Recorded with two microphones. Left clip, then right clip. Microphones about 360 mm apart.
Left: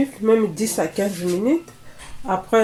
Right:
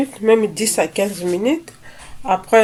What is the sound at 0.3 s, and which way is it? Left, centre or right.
Speech, right.